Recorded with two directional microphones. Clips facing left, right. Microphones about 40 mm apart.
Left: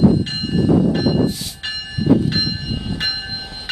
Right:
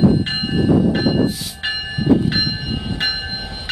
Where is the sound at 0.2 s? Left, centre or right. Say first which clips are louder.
Right 1 dB; right.